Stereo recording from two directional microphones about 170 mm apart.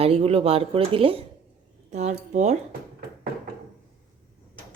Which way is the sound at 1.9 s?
45° right (ahead or behind).